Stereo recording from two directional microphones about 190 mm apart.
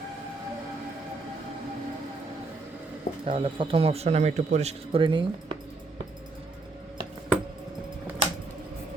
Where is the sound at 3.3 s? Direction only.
30° right (ahead or behind).